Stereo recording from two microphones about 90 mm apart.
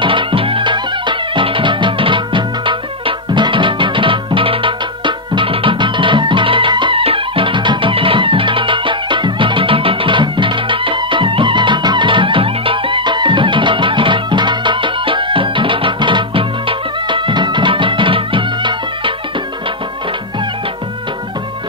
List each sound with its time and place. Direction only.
0.0 s music: 75° right (ahead or behind)